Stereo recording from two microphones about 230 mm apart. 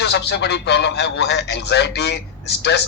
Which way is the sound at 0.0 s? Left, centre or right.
Left.